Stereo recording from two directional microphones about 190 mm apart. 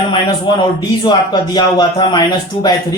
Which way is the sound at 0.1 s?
25° left (ahead or behind).